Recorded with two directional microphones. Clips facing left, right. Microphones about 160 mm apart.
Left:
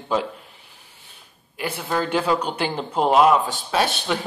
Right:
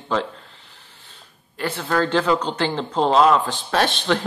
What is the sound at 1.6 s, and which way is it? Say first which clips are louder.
Speech: right 3 dB; 10° left (ahead or behind).